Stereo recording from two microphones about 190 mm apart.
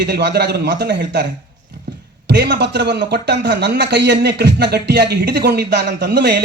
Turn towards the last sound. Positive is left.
turn(degrees=-60)  # may be behind; listen again after turning